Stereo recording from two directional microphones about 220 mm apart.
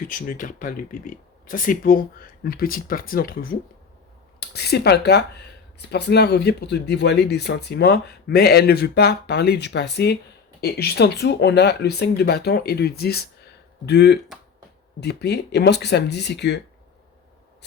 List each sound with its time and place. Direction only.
0.0 s speech: 40° left (ahead or behind)